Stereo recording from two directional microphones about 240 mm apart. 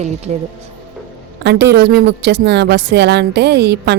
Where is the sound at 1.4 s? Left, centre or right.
Right.